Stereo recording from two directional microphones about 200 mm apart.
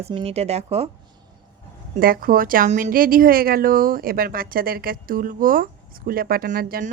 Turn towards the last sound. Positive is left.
turn(degrees=-40)  # may be behind; listen again after turning